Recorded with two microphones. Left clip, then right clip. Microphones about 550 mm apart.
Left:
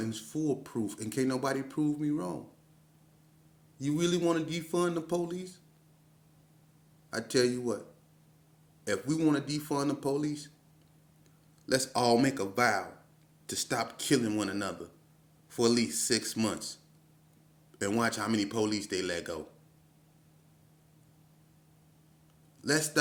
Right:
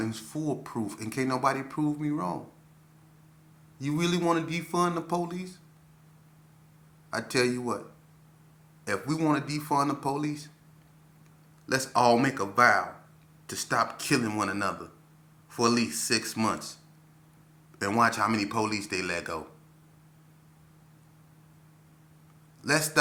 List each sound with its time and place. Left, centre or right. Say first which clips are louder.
0.0 s speech: right 1 dB; left
3.8 s speech: right 1 dB; left
7.1 s speech: right 2 dB; left
8.8 s speech: right 1 dB; left
11.6 s speech: right 5 dB; left
17.7 s speech: right 6 dB; left
22.6 s a man's voice: right 3 dB; left